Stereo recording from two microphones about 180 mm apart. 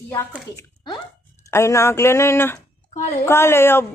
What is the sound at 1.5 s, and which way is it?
Speech, 15° left (ahead or behind).